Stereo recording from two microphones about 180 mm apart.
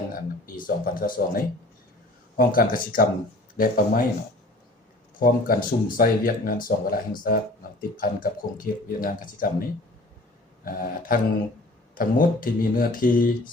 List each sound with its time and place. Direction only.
0.1 s speech: 50° left (ahead or behind)
5.2 s speech: 50° left (ahead or behind)
10.7 s speech: 55° left (ahead or behind)